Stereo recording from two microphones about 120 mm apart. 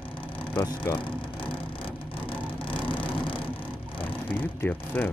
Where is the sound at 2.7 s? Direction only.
45° left (ahead or behind).